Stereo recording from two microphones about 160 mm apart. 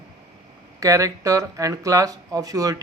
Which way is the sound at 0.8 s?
20° right (ahead or behind).